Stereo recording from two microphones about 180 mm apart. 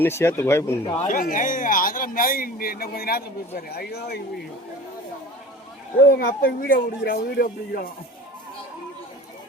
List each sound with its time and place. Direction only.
0.0 s speech: 15° left (ahead or behind)
1.0 s speech: 45° left (ahead or behind); by 4.2 s 65° left (ahead or behind)
6.1 s speech: 55° left (ahead or behind)